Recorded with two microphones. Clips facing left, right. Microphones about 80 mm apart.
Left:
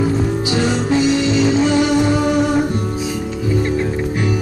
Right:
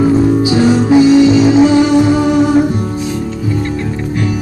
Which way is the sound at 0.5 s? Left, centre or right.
Centre.